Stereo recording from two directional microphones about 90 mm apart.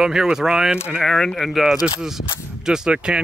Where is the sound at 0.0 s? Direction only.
5° right (ahead or behind).